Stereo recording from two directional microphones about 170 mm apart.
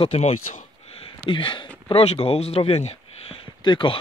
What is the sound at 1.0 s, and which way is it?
Speech, 30° left (ahead or behind).